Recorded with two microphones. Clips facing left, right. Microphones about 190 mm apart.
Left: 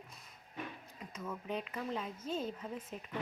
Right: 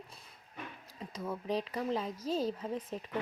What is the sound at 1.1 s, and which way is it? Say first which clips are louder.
Speech: right 5 dB; 35° right (ahead or behind).